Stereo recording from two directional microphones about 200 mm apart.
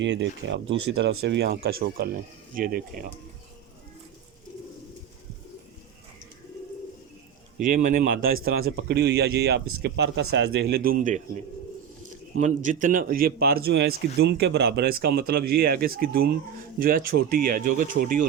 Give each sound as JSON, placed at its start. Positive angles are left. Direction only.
{"t": 0.0, "sound": "speech", "side_deg": -65}
{"t": 7.7, "sound": "a man's voice", "side_deg": -40}